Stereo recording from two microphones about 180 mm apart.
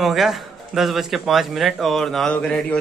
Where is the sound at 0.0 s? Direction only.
Centre (ahead or behind).